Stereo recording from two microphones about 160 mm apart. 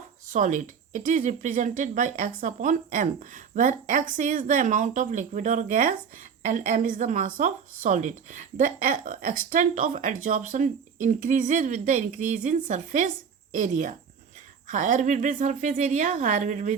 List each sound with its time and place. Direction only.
0.3 s a woman's voice: 50° right (ahead or behind)